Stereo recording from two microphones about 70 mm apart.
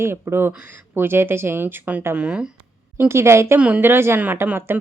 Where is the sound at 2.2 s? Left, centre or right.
Centre.